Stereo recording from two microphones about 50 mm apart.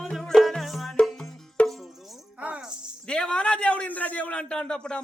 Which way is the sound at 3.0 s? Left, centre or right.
Centre.